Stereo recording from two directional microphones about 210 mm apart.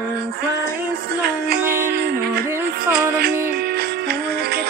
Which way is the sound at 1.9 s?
50° right (ahead or behind).